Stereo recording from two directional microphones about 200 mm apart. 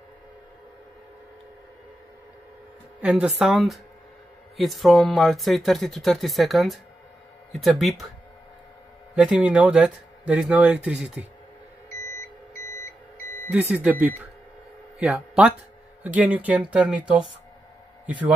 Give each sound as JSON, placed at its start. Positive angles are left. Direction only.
{"t": 3.0, "sound": "speech", "side_deg": -5}
{"t": 9.1, "sound": "speech", "side_deg": -5}
{"t": 13.5, "sound": "speech", "side_deg": -10}